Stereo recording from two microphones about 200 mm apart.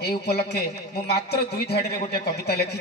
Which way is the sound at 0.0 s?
55° left (ahead or behind).